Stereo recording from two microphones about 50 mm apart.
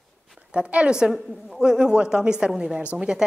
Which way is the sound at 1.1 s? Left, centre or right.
Centre.